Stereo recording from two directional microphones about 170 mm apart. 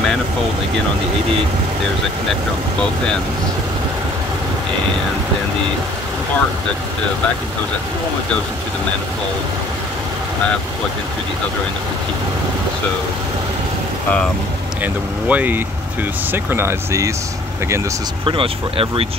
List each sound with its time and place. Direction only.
14.8 s speech: 10° right (ahead or behind)
18.2 s speech: 30° right (ahead or behind)